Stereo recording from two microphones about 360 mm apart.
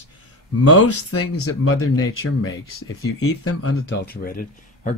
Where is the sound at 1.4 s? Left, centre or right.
Left.